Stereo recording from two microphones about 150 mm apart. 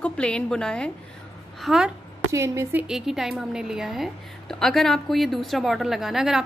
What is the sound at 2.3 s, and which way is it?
Speech, 20° right (ahead or behind).